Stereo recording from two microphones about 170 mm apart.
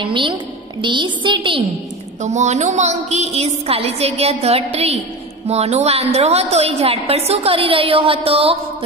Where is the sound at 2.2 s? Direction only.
45° right (ahead or behind).